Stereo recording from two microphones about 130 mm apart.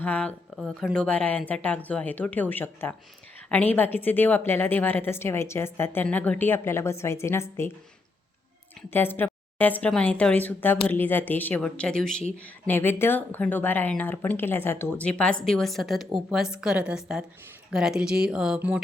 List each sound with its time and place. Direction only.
0.0 s a woman's voice: 10° left (ahead or behind)
8.9 s a woman's voice: 15° left (ahead or behind); by 18.8 s 5° right (ahead or behind)